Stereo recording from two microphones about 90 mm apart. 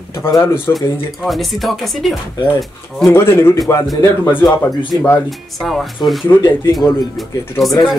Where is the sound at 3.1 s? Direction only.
25° left (ahead or behind).